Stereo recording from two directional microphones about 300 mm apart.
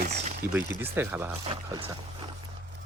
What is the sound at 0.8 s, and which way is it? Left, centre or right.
Speech, centre.